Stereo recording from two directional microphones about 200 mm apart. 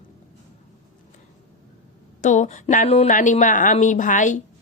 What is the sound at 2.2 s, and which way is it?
A woman's voice, 35° left (ahead or behind).